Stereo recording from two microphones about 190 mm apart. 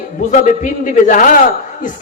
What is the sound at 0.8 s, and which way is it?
Speech, 45° left (ahead or behind).